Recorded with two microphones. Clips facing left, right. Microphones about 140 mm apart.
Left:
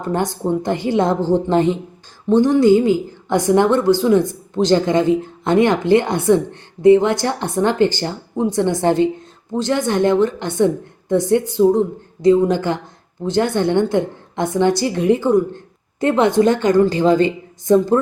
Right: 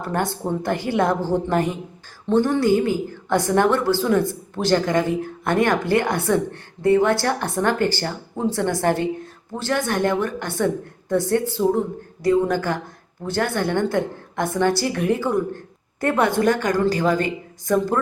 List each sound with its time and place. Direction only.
0.0 s a woman's voice: 20° left (ahead or behind)